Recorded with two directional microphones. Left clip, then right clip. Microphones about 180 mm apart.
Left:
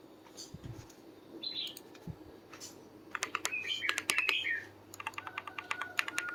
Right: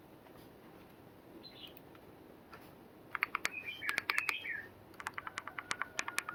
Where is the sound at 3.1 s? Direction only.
Centre (ahead or behind).